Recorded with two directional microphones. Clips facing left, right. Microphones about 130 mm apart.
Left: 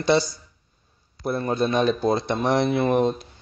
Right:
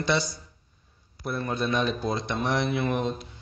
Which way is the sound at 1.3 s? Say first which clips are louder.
Left 5 dB; 35° left (ahead or behind).